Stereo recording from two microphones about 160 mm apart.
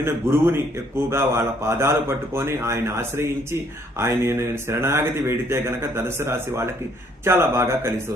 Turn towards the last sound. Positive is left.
turn(degrees=-15)  # may be behind; listen again after turning